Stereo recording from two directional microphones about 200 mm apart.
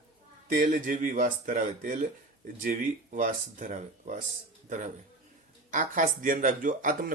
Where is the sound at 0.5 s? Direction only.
40° right (ahead or behind).